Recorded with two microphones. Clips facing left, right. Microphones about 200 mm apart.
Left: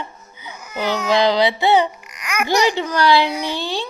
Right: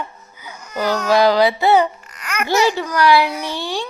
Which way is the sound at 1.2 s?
20° left (ahead or behind).